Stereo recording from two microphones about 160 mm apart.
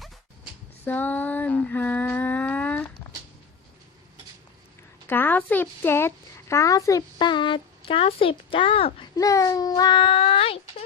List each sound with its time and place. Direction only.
0.9 s a sound: 10° left (ahead or behind)
5.0 s a woman's voice: 10° left (ahead or behind); by 9.0 s 35° left (ahead or behind)
9.1 s a child's voice: 20° left (ahead or behind); by 10.8 s 35° left (ahead or behind)